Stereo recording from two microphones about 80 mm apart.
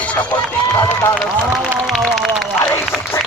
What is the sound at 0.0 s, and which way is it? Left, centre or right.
Speech, left.